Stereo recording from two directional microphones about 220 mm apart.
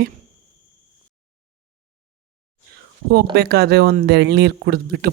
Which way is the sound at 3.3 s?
45° right (ahead or behind).